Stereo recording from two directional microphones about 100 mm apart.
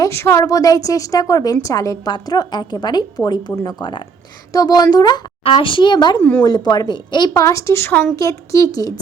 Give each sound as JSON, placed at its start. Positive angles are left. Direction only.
{"t": 0.0, "sound": "a woman's voice", "side_deg": 25}
{"t": 5.4, "sound": "a woman's voice", "side_deg": 65}
{"t": 7.3, "sound": "a woman's voice", "side_deg": 30}
{"t": 8.1, "sound": "a woman's voice", "side_deg": 35}